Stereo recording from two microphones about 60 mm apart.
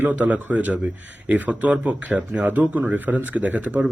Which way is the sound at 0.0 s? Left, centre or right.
Right.